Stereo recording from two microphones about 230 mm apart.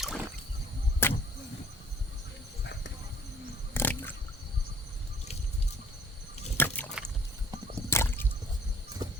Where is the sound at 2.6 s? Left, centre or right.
Left.